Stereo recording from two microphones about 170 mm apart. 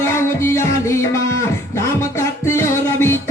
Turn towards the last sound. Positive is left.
turn(degrees=15)  # may be behind; listen again after turning